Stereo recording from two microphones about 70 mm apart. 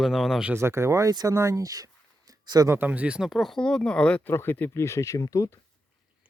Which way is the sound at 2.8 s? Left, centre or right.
Right.